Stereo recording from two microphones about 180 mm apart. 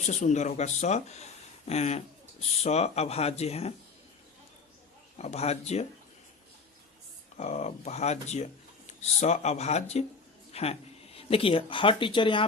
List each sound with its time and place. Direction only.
0.0 s speech: 40° left (ahead or behind)
5.1 s speech: 35° left (ahead or behind)
7.3 s speech: 40° left (ahead or behind)